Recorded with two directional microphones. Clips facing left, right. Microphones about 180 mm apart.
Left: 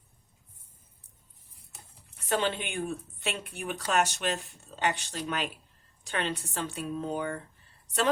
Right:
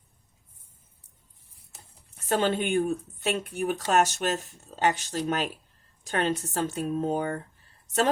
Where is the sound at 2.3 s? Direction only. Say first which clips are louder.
Right 5 dB; 45° right (ahead or behind).